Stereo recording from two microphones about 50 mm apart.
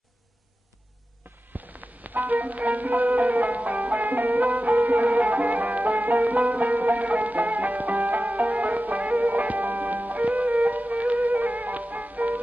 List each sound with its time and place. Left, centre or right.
1.6 s music: right